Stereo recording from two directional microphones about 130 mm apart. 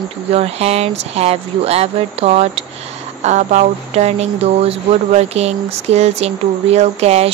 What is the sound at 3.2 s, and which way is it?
Speech, 65° right (ahead or behind).